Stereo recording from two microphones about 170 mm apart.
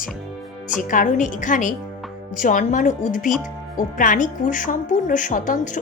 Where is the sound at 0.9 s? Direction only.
50° left (ahead or behind).